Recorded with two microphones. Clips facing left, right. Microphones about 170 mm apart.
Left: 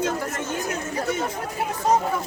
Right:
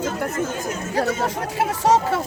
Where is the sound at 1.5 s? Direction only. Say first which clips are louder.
Right 3 dB; 85° right.